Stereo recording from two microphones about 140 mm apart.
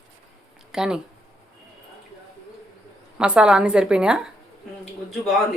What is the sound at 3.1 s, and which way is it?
Speech, 5° right (ahead or behind).